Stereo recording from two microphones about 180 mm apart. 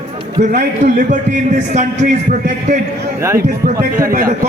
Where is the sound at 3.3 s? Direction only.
55° right (ahead or behind).